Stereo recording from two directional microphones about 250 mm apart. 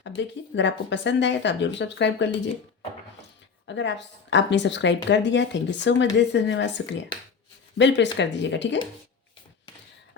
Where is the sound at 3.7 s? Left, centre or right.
Left.